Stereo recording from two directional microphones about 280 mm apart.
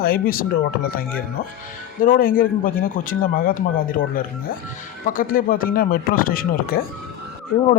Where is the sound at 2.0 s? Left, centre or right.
Left.